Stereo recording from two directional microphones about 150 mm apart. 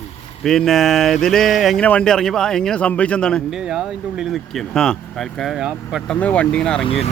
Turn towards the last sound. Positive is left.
turn(degrees=40)  # may be behind; listen again after turning